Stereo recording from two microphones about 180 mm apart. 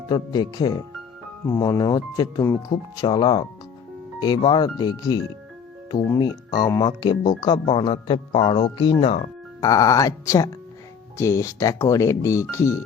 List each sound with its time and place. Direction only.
0.1 s speech: 20° left (ahead or behind)
9.6 s speech: 20° left (ahead or behind)